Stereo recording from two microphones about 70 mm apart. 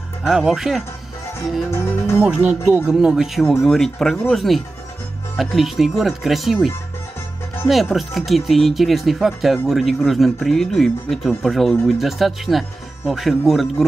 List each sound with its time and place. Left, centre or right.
0.2 s speech: centre
1.8 s speech: left
2.2 s speech: centre